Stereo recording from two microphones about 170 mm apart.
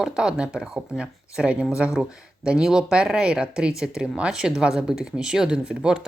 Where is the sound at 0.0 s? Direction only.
5° right (ahead or behind).